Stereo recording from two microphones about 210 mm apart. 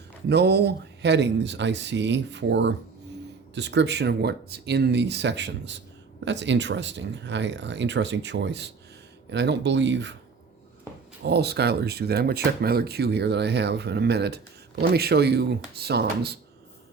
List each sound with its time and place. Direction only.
0.3 s speech: 50° right (ahead or behind)
11.2 s speech: 50° right (ahead or behind)